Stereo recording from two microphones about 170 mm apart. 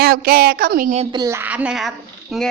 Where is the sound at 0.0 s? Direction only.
60° right (ahead or behind).